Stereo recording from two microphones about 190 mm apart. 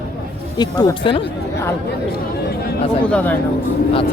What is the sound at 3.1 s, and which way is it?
Speech, 10° left (ahead or behind).